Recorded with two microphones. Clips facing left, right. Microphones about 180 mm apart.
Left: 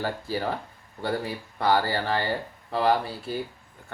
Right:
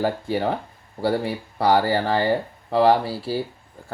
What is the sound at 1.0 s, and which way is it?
Speech, 30° right (ahead or behind).